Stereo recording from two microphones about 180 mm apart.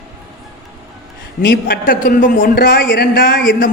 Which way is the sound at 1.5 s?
55° left (ahead or behind).